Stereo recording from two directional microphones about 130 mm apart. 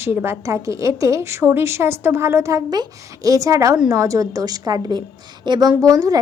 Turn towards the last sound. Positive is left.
turn(degrees=-25)  # may be behind; listen again after turning